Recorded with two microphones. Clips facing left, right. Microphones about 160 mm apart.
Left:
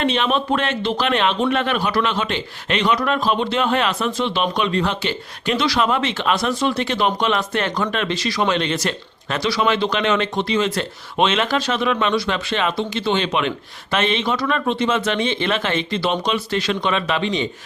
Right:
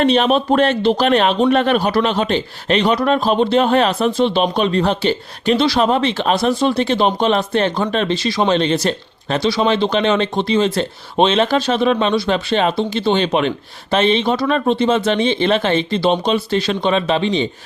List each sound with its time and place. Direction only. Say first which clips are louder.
0.0 s speech: right 6 dB; 40° right (ahead or behind)